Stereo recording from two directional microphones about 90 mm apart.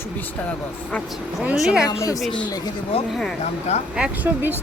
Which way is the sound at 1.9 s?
40° left (ahead or behind).